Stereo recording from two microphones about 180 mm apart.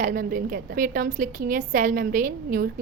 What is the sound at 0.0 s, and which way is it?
A woman's voice, 50° right (ahead or behind).